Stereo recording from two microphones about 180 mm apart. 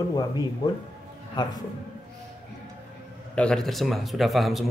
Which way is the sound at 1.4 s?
25° left (ahead or behind).